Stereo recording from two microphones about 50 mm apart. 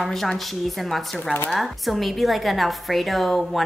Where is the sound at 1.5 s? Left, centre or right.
Centre.